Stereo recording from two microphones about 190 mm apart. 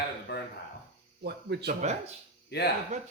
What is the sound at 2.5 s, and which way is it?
Speech, 55° left (ahead or behind).